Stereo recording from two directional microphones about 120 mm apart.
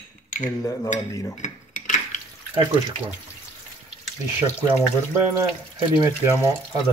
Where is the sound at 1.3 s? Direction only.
90° left.